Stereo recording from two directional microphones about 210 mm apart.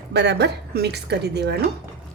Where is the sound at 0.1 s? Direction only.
55° right (ahead or behind).